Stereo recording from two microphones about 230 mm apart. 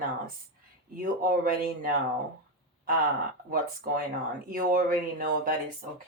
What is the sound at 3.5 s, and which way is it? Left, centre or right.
Speech, right.